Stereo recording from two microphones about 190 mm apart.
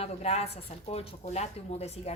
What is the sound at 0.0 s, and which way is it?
A woman's voice, 35° left (ahead or behind).